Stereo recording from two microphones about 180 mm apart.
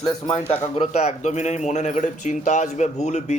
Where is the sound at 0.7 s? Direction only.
35° left (ahead or behind).